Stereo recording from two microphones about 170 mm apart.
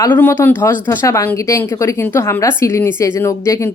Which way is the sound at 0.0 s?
10° left (ahead or behind).